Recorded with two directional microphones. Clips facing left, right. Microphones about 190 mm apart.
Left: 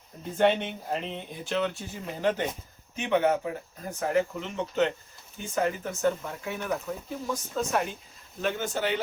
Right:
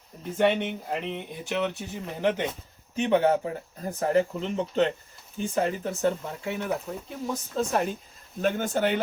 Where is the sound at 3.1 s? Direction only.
35° right (ahead or behind).